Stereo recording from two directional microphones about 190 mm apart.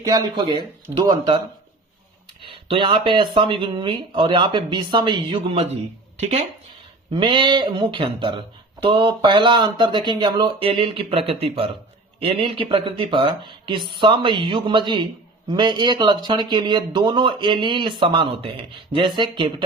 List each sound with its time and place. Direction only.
0.0 s speech: 20° right (ahead or behind)
2.4 s speech: 25° right (ahead or behind)